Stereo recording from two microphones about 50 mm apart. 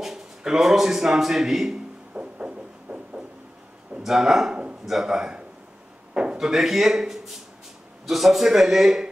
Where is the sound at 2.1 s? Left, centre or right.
Right.